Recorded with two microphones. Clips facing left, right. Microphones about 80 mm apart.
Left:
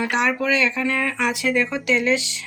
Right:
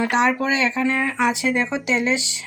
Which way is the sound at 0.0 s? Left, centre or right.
Right.